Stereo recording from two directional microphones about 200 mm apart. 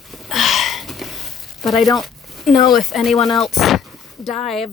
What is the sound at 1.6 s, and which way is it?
Speech, centre (ahead or behind).